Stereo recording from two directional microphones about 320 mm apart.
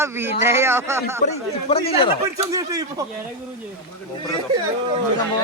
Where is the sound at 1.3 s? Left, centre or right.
Centre.